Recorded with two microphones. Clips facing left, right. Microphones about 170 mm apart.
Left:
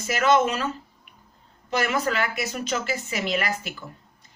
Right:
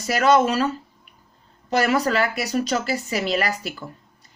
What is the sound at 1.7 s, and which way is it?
A woman's voice, 35° right (ahead or behind).